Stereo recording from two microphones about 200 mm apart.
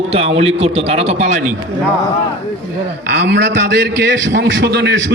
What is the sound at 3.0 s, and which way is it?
A man's voice, 55° right (ahead or behind).